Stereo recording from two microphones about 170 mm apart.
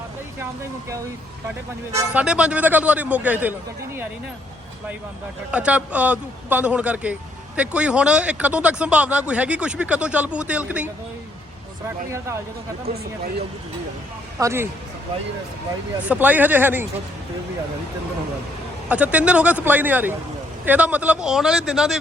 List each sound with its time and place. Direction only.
2.0 s a man's voice: 5° right (ahead or behind)
5.5 s a man's voice: 5° right (ahead or behind)
14.3 s a man's voice: 15° right (ahead or behind)
16.0 s a man's voice: 10° right (ahead or behind)
18.9 s a man's voice: 10° right (ahead or behind)